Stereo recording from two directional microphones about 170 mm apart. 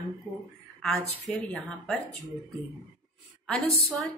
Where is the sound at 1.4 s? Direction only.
10° left (ahead or behind).